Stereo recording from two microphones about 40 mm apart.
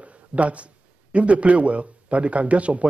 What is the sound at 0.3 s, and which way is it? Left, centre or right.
Speech, right.